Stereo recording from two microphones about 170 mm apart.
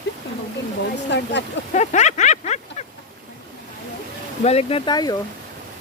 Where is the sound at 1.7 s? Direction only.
45° left (ahead or behind).